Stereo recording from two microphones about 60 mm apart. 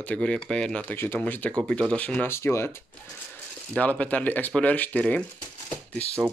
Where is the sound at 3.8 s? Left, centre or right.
Left.